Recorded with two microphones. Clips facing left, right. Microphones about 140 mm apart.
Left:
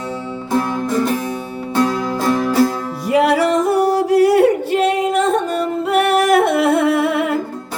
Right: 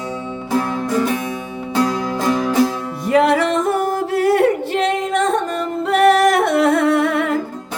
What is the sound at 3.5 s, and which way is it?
Yodeling, 40° left (ahead or behind).